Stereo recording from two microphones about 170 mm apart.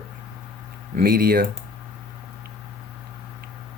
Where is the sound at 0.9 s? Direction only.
60° right (ahead or behind).